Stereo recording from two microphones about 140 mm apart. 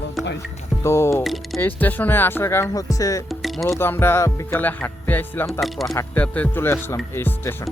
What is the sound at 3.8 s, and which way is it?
Speech, 15° left (ahead or behind).